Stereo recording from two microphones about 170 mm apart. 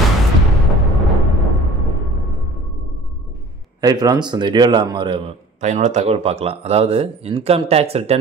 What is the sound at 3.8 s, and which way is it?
A man's voice, 20° right (ahead or behind).